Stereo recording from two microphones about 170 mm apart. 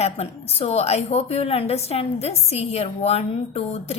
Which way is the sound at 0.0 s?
35° left (ahead or behind).